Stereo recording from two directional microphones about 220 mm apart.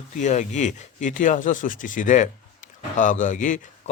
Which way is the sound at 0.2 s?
35° left (ahead or behind).